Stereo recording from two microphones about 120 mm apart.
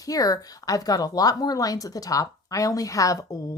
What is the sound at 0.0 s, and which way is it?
Speech, 30° left (ahead or behind).